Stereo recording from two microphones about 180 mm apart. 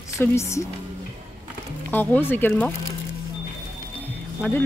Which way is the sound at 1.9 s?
10° left (ahead or behind).